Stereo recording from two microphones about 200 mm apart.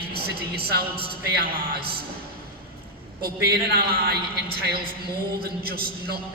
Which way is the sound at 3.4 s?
50° right (ahead or behind).